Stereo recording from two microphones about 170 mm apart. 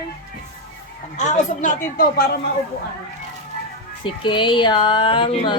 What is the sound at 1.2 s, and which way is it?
Speech, 45° left (ahead or behind).